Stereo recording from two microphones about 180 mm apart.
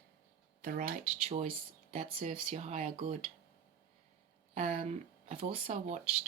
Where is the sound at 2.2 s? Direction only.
40° right (ahead or behind).